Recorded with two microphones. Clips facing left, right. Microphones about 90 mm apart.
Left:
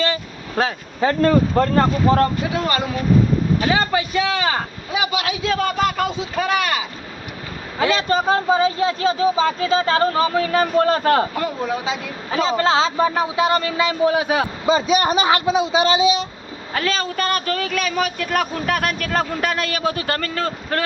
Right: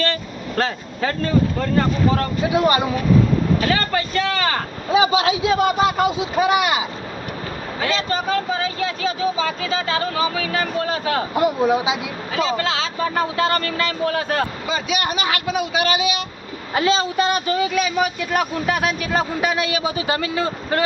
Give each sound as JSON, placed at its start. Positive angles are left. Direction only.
{"t": 0.0, "sound": "vehicle", "side_deg": 10}
{"t": 1.2, "sound": "speech", "side_deg": 60}
{"t": 2.1, "sound": "speech", "side_deg": 40}
{"t": 2.5, "sound": "speech", "side_deg": -15}
{"t": 3.7, "sound": "speech", "side_deg": 15}
{"t": 4.9, "sound": "speech", "side_deg": -30}
{"t": 8.3, "sound": "speech", "side_deg": 30}
{"t": 11.3, "sound": "speech", "side_deg": -15}
{"t": 12.5, "sound": "speech", "side_deg": 35}
{"t": 13.0, "sound": "speech", "side_deg": 15}
{"t": 14.7, "sound": "speech", "side_deg": 35}
{"t": 16.7, "sound": "speech", "side_deg": -20}